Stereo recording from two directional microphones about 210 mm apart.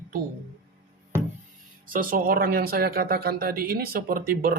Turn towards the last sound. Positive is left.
turn(degrees=-45)  # may be behind; listen again after turning